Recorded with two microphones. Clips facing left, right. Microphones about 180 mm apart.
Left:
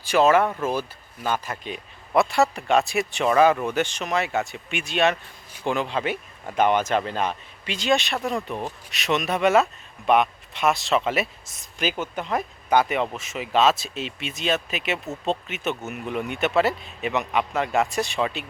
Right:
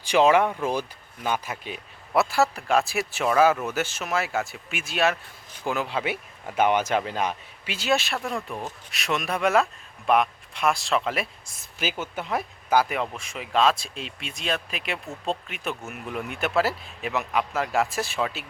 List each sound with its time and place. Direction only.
0.0 s speech: 15° right (ahead or behind); by 14.9 s centre (ahead or behind)
15.0 s speech: 20° left (ahead or behind)
15.3 s speech: centre (ahead or behind)